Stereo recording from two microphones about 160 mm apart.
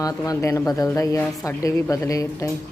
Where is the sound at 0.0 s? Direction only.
20° left (ahead or behind).